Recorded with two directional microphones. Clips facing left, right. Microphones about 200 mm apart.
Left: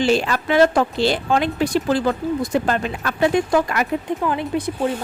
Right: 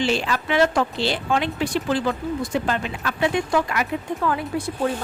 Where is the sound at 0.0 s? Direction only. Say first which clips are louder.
Left 4 dB; 45° left (ahead or behind).